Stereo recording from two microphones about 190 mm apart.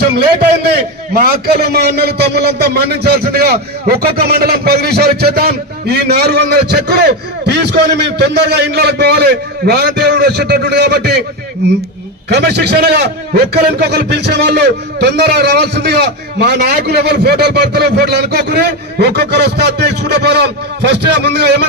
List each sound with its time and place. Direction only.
0.1 s a man's voice: 60° right (ahead or behind)
12.3 s a man's voice: 60° right (ahead or behind)